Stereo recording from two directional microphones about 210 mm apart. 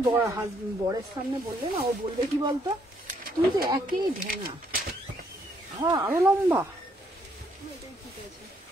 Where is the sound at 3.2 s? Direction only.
45° right (ahead or behind).